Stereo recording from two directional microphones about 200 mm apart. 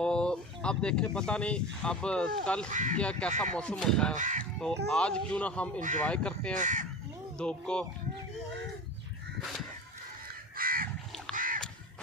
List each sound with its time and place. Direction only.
0.0 s speech: 5° left (ahead or behind)
2.7 s speech: 40° right (ahead or behind)
3.0 s speech: 5° left (ahead or behind)
4.2 s speech: 40° right (ahead or behind)
4.8 s speech: 5° left (ahead or behind)
6.5 s speech: 40° right (ahead or behind)
7.3 s speech: 5° left (ahead or behind)
10.6 s crow: 45° right (ahead or behind)